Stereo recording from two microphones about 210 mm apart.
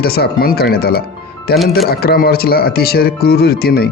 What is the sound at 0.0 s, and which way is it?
Speech, 50° left (ahead or behind).